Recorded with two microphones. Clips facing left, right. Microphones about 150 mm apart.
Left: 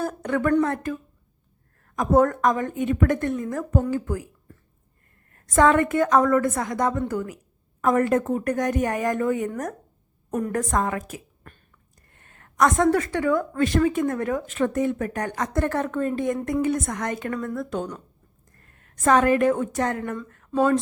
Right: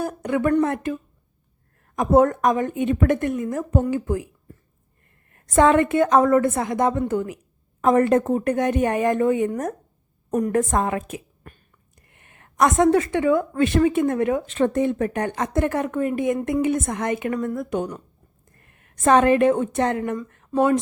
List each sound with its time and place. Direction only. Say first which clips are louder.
0.0 s speech: right 2 dB; 10° right (ahead or behind)
2.0 s speech: right 2 dB; 20° right (ahead or behind)
5.3 s a woman's voice: right 2 dB; 20° right (ahead or behind)